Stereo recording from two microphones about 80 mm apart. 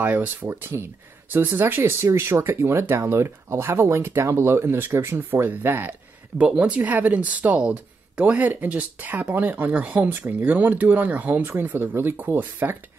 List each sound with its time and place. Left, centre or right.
0.0 s speech: right
6.3 s speech: centre